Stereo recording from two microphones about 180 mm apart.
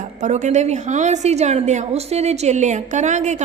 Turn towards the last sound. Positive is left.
turn(degrees=-40)  # may be behind; listen again after turning